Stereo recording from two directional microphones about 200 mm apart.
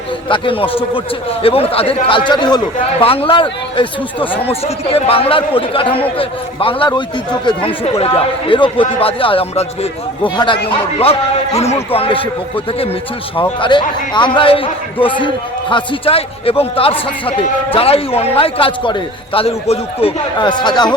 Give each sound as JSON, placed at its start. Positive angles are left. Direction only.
{"t": 0.3, "sound": "a man's voice", "side_deg": 25}
{"t": 13.3, "sound": "a man's voice", "side_deg": 25}